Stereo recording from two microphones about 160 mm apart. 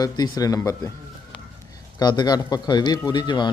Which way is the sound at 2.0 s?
25° left (ahead or behind).